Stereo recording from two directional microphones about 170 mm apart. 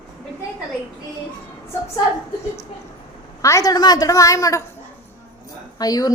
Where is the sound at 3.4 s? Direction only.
20° left (ahead or behind).